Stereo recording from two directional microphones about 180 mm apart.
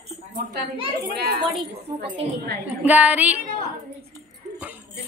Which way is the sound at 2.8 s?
10° right (ahead or behind).